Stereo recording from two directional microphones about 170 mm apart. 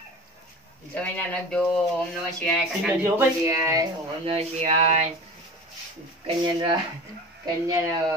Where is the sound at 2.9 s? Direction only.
15° right (ahead or behind).